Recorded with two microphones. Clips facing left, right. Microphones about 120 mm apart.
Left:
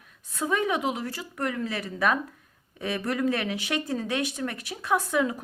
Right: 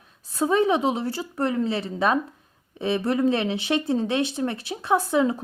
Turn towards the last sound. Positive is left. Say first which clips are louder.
# right 4 dB
turn(degrees=-30)  # may be behind; listen again after turning